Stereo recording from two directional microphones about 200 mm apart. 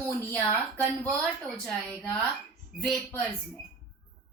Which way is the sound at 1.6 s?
5° left (ahead or behind).